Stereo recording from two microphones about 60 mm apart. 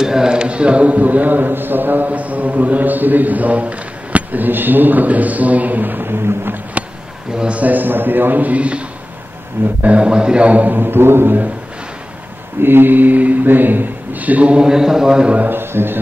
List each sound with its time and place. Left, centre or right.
0.0 s a man's voice: centre; by 6.6 s right
7.3 s a man's voice: centre
9.8 s a man's voice: centre; by 11.4 s right
12.6 s a man's voice: right
15.5 s a man's voice: right